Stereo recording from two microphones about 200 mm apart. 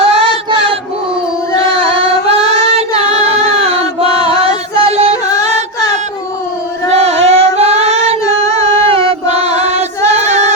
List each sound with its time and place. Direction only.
0.0 s choir: 30° right (ahead or behind)
2.7 s music: 30° right (ahead or behind)
6.9 s singing: 30° right (ahead or behind)
8.6 s music: 25° right (ahead or behind)